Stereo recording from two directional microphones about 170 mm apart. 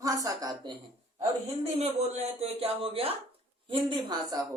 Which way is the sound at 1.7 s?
40° right (ahead or behind).